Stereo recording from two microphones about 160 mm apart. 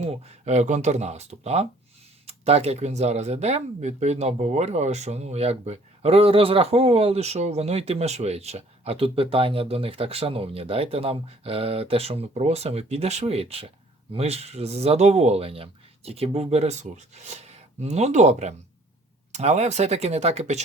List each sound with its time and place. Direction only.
0.0 s speech: 40° right (ahead or behind)